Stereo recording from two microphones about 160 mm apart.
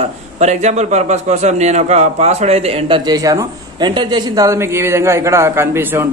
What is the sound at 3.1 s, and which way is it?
A man's voice, 20° right (ahead or behind).